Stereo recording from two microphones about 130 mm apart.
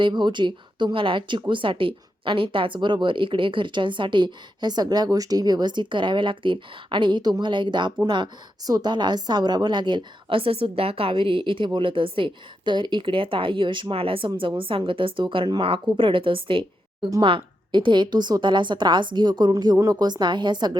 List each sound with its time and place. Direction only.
0.0 s a woman's voice: 35° right (ahead or behind)